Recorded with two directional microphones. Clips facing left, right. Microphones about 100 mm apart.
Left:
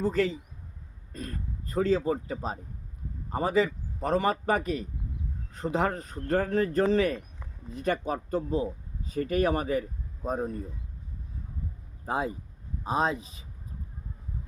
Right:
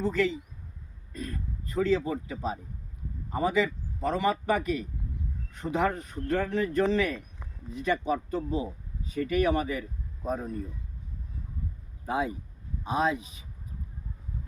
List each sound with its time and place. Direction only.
0.0 s speech: 35° left (ahead or behind)
12.0 s speech: 35° left (ahead or behind)